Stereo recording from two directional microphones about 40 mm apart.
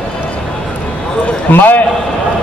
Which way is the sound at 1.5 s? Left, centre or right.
Left.